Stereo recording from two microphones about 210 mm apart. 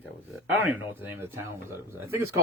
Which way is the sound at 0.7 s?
10° right (ahead or behind).